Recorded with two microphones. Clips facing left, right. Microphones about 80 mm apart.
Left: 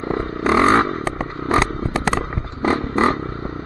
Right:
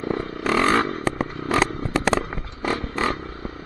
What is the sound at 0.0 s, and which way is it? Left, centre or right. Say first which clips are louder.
Vehicle: left 4 dB; left.